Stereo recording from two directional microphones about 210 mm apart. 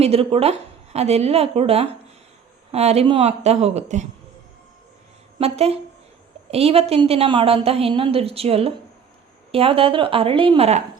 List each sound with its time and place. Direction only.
0.0 s a woman's voice: 30° right (ahead or behind)
5.4 s a woman's voice: 30° right (ahead or behind)